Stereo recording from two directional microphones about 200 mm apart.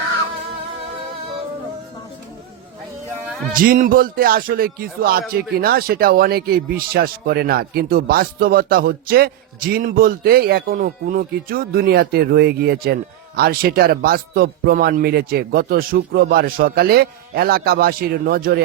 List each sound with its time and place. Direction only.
3.5 s a man's voice: 45° right (ahead or behind)